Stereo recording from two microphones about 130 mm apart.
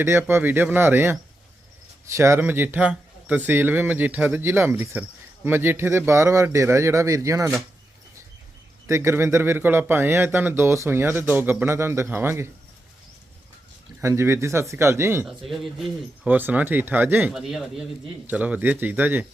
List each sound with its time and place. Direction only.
0.0 s speech: 20° right (ahead or behind)
8.9 s speech: 20° right (ahead or behind)
14.0 s speech: 20° right (ahead or behind)
15.3 s a man's voice: centre (ahead or behind)
16.2 s speech: 10° right (ahead or behind)
17.3 s a man's voice: centre (ahead or behind)